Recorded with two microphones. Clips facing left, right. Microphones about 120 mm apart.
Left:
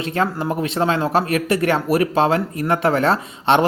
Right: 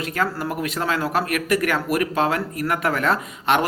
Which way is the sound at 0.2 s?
25° left (ahead or behind).